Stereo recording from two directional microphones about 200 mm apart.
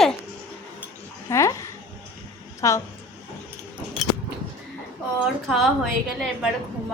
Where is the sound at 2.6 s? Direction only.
15° left (ahead or behind).